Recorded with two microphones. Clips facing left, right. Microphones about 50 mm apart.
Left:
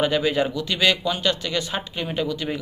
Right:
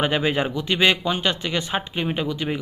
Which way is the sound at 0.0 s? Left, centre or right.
Right.